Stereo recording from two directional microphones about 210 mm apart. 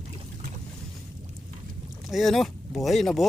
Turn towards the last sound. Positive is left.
turn(degrees=0)  # may be behind; listen again after turning